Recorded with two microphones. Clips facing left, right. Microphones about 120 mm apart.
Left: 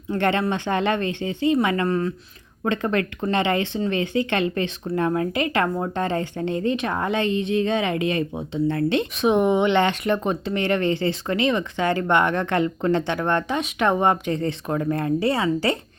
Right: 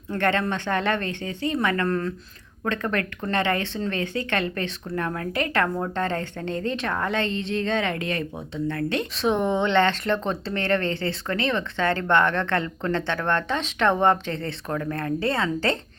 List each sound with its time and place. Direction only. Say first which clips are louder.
0.1 s speech: left 2 dB; 15° left (ahead or behind)
2.6 s speech: left 3 dB; 20° left (ahead or behind)